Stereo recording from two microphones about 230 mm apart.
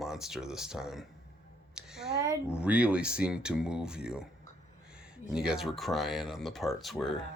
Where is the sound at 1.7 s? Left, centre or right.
Centre.